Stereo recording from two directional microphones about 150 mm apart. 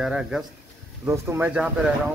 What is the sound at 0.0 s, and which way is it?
Speech, 5° right (ahead or behind).